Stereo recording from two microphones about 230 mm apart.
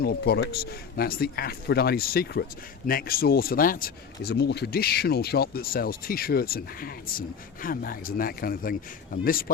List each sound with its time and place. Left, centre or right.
0.0 s speech: left